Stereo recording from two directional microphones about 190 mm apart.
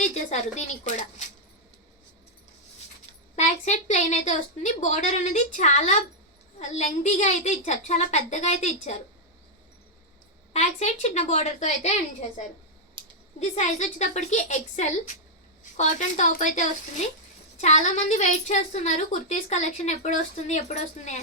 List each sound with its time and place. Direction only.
0.0 s a woman's voice: 35° left (ahead or behind)
3.3 s a woman's voice: 40° left (ahead or behind)
10.5 s a woman's voice: 35° left (ahead or behind)
13.4 s a woman's voice: 40° left (ahead or behind)